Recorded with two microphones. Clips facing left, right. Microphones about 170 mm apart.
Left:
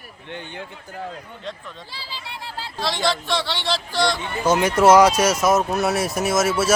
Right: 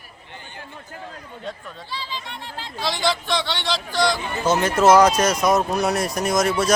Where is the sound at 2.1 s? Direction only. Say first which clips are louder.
Right 1 dB; 35° left (ahead or behind).